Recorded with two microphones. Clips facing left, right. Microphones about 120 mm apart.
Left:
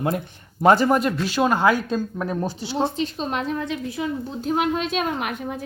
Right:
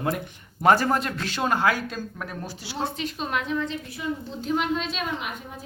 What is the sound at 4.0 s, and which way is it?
Speech, 90° left.